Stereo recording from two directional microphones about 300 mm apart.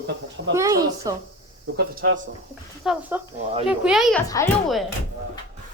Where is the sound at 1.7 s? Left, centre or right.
Right.